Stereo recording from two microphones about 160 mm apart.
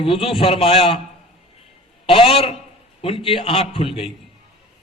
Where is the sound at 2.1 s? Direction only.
35° left (ahead or behind).